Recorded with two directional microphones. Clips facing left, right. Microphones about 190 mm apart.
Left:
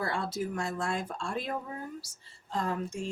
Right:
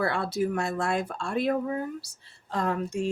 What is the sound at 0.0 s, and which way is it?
Speech, 65° right (ahead or behind).